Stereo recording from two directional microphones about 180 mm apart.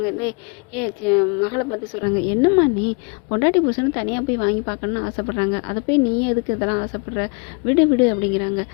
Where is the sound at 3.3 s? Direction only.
30° left (ahead or behind).